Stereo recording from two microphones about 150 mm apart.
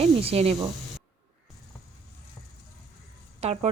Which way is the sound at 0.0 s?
45° right (ahead or behind).